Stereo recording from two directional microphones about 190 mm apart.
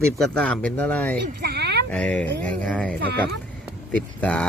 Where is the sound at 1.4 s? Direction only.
60° right (ahead or behind).